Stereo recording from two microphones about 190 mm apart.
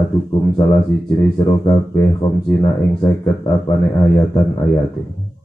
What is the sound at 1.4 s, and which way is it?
Speech, 25° left (ahead or behind).